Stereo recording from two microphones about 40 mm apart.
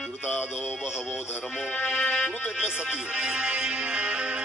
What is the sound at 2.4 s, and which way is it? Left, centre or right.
Music, right.